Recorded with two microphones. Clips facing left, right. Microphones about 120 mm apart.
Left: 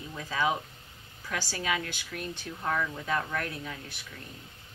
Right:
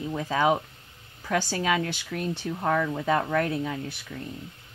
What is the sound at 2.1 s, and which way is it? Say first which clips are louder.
Speech: right 8 dB; 60° right (ahead or behind).